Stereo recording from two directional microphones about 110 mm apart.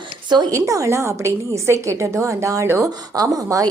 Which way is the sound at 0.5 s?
30° right (ahead or behind).